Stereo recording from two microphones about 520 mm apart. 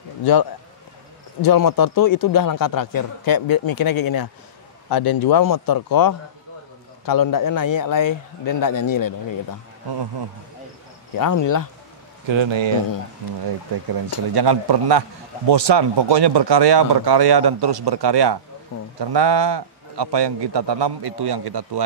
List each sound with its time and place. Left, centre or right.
0.2 s a man's voice: left
11.1 s a man's voice: left
12.3 s a man's voice: right
14.3 s a man's voice: right